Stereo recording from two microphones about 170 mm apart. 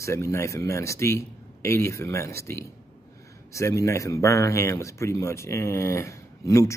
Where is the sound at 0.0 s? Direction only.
15° left (ahead or behind).